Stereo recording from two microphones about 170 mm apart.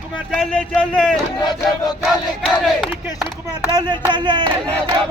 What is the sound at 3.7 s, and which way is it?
Speech, 25° right (ahead or behind).